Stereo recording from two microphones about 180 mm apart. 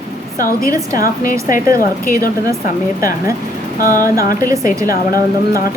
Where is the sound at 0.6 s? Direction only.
20° right (ahead or behind).